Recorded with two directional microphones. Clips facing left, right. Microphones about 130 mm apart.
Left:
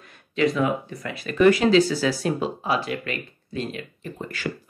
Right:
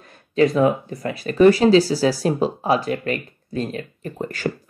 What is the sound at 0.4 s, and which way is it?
Speech, 40° right (ahead or behind).